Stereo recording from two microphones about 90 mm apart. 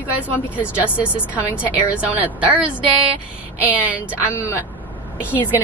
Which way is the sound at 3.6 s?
15° right (ahead or behind).